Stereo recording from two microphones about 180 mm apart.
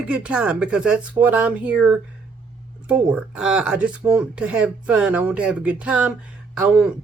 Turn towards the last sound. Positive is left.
turn(degrees=-5)  # may be behind; listen again after turning